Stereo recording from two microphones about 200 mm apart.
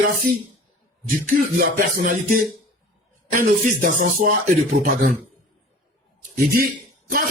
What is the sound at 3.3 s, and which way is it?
Speech, 40° right (ahead or behind).